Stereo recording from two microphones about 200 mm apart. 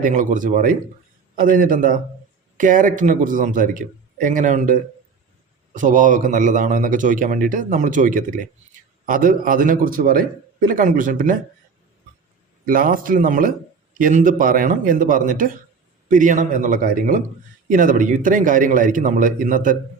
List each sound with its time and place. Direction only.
0.0 s a man's voice: 40° right (ahead or behind)
12.6 s a man's voice: 45° right (ahead or behind)